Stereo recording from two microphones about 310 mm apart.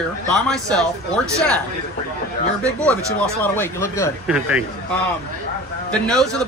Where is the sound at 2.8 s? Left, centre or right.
Centre.